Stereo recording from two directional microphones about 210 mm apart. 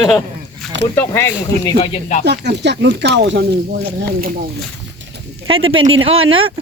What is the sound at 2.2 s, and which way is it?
Speech, 55° right (ahead or behind).